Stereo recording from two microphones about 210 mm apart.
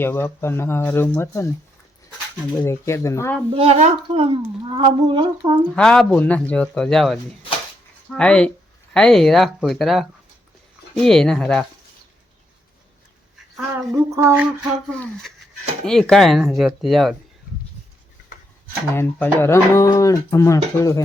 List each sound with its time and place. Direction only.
0.0 s speech: 10° left (ahead or behind)
3.5 s speech: 30° right (ahead or behind)
5.7 s speech: 5° left (ahead or behind)
13.6 s a sound: 10° right (ahead or behind)
14.8 s speech: centre (ahead or behind)
18.9 s speech: 10° left (ahead or behind)